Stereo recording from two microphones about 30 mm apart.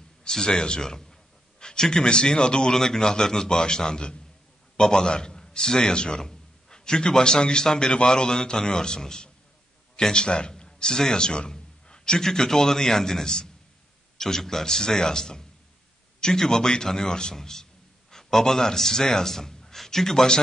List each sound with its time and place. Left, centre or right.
0.3 s a man's voice: left
10.5 s a sound: left
12.2 s a man's voice: centre